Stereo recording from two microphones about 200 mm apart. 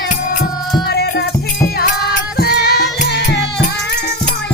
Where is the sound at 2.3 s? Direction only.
50° left (ahead or behind).